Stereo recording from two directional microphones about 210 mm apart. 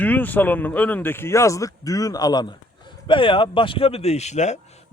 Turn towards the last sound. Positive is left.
turn(degrees=30)  # may be behind; listen again after turning